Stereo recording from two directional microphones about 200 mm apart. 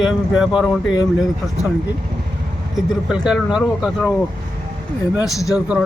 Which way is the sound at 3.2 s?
5° right (ahead or behind).